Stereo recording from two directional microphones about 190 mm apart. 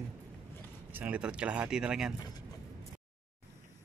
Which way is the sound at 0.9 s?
5° right (ahead or behind).